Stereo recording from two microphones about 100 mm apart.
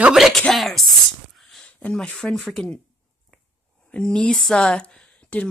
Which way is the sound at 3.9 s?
10° left (ahead or behind).